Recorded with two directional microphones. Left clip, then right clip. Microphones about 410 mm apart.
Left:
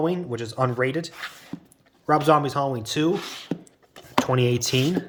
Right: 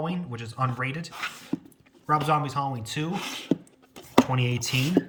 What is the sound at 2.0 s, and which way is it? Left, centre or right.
Speech, centre.